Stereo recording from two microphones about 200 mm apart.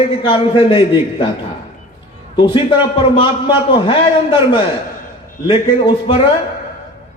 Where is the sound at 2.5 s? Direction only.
25° left (ahead or behind).